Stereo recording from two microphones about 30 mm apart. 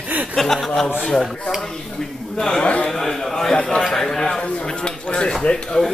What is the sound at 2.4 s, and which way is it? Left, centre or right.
Speech, left.